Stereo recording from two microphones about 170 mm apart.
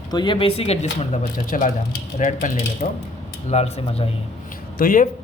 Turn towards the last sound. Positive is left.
turn(degrees=55)  # may be behind; listen again after turning